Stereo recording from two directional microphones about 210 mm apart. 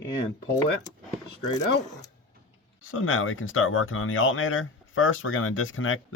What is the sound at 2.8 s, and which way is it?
Speech, 70° left (ahead or behind).